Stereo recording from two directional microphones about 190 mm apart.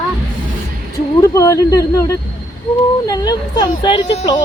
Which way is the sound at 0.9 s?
15° left (ahead or behind).